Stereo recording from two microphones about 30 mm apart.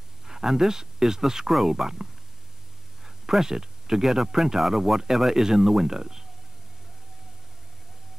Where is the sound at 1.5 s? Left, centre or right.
Centre.